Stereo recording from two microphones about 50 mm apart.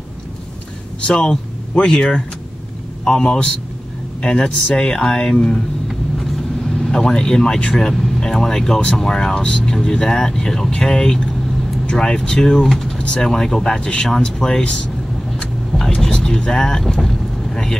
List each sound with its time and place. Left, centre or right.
1.2 s speech: centre
6.8 s speech: centre
16.0 s speech: centre